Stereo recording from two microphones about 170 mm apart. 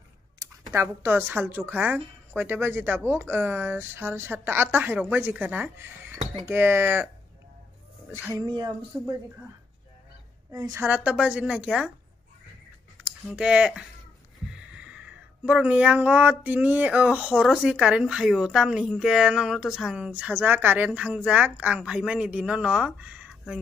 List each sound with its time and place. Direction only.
0.7 s speech: 15° right (ahead or behind)
8.1 s speech: 15° right (ahead or behind)
8.5 s a sound: 25° right (ahead or behind)
10.5 s speech: 20° right (ahead or behind)
13.3 s speech: 5° right (ahead or behind)